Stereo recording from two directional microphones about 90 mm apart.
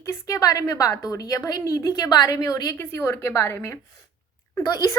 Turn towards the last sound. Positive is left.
turn(degrees=45)  # may be behind; listen again after turning